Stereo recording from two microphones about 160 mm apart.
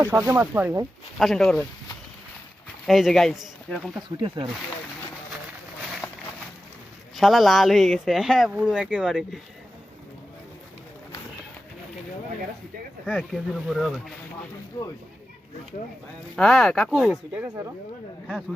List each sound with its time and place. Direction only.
0.0 s speech: 15° right (ahead or behind)
1.2 s speech: centre (ahead or behind)
2.8 s speech: centre (ahead or behind)
6.0 s a sound: 5° left (ahead or behind)
7.2 s speech: centre (ahead or behind)
13.1 s speech: 5° right (ahead or behind)
14.8 s speech: 20° left (ahead or behind)
16.3 s speech: centre (ahead or behind)